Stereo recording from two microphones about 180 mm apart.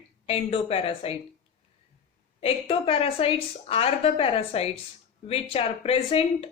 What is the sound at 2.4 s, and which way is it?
Speech, 30° left (ahead or behind).